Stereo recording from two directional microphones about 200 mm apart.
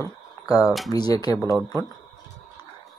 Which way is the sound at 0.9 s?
20° left (ahead or behind).